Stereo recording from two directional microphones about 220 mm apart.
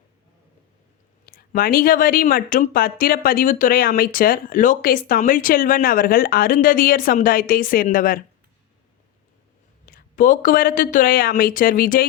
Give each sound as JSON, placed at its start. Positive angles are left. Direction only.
{"t": 1.2, "sound": "speech", "side_deg": 40}
{"t": 9.8, "sound": "speech", "side_deg": 40}